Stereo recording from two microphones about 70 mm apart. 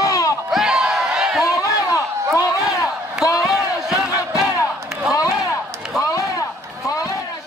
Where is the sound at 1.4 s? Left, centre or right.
Left.